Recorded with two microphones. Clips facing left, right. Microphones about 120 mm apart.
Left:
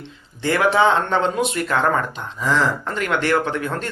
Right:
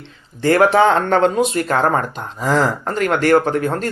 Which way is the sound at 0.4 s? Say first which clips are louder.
Right 4 dB; 45° right (ahead or behind).